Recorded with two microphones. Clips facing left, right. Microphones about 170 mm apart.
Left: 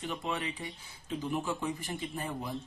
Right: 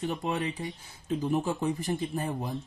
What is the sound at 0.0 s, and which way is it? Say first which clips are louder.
Speech: right 5 dB; 40° right (ahead or behind).